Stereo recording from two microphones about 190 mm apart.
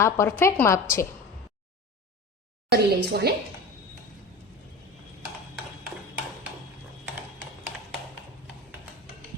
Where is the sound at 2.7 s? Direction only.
55° right (ahead or behind).